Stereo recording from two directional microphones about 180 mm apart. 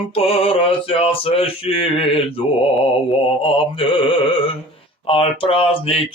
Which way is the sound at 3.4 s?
30° left (ahead or behind).